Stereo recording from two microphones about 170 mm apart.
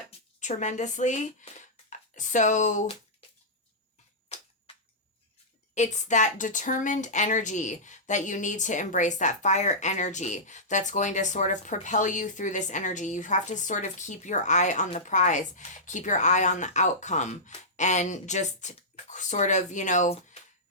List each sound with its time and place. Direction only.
0.3 s speech: 45° left (ahead or behind)
4.3 s finger snapping: 40° left (ahead or behind)
5.7 s speech: 45° left (ahead or behind)